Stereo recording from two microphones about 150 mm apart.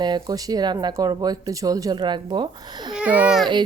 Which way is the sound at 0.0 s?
25° right (ahead or behind).